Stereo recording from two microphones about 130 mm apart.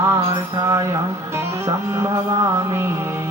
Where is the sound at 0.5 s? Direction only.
25° right (ahead or behind).